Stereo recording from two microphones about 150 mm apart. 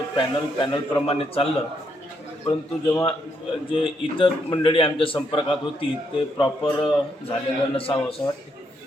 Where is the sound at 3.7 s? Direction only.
35° left (ahead or behind).